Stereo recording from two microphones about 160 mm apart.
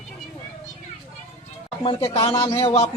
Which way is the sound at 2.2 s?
30° left (ahead or behind).